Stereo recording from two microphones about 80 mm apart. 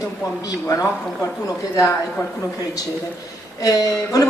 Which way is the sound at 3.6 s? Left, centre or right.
Left.